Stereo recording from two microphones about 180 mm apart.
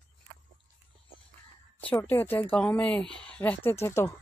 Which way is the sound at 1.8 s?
10° left (ahead or behind).